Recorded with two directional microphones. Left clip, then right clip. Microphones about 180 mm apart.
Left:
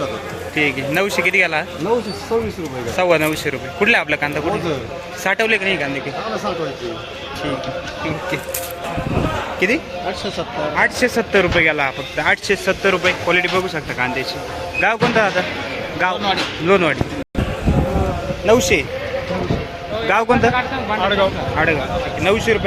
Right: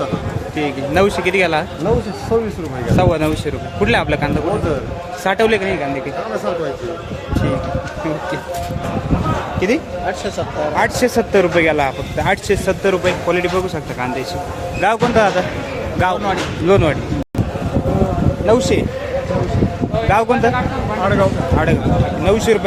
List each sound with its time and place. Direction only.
0.5 s speech: 5° right (ahead or behind)
2.9 s speech: 5° right (ahead or behind)
9.6 s speech: centre (ahead or behind)
10.8 s speech: 15° right (ahead or behind)
18.4 s speech: centre (ahead or behind)
20.1 s speech: centre (ahead or behind)